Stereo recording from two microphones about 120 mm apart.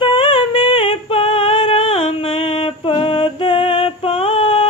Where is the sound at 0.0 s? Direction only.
45° left (ahead or behind).